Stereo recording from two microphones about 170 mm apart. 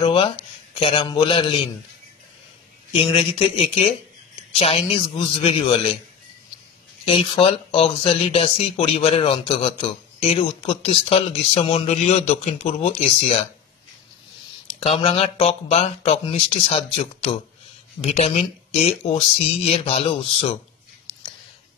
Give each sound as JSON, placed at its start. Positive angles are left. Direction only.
{"t": 0.0, "sound": "speech", "side_deg": 30}
{"t": 2.9, "sound": "speech", "side_deg": 30}
{"t": 7.1, "sound": "speech", "side_deg": 30}
{"t": 14.8, "sound": "speech", "side_deg": 35}